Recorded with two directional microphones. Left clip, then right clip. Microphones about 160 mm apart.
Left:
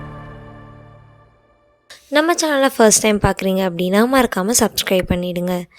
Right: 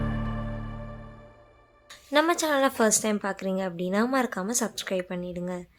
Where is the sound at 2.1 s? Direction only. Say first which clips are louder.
Left 7 dB; 35° left (ahead or behind).